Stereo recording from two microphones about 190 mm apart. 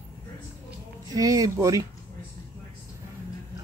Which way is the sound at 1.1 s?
20° right (ahead or behind).